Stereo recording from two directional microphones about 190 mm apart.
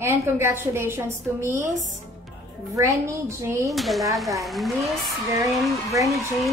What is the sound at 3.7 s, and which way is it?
Speech, centre (ahead or behind).